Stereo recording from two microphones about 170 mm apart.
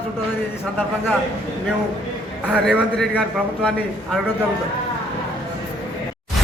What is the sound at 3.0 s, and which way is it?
A man's voice, 5° left (ahead or behind).